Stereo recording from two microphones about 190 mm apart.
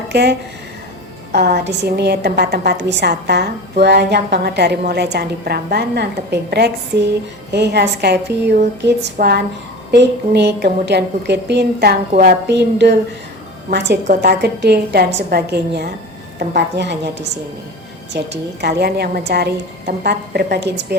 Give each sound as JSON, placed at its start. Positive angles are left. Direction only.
{"t": 0.1, "sound": "a woman's voice", "side_deg": -60}